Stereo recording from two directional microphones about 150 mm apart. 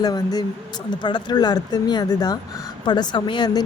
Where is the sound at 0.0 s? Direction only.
25° left (ahead or behind).